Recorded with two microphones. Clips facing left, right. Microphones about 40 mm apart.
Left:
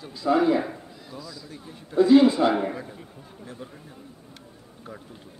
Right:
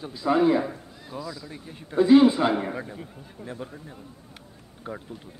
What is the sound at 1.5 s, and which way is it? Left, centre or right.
A man's voice, right.